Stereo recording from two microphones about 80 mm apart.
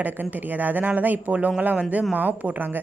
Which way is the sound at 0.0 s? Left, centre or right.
Right.